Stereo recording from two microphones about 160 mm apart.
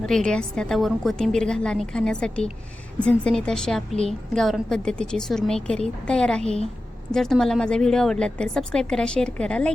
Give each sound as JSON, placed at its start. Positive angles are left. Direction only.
{"t": 0.0, "sound": "a woman's voice", "side_deg": 5}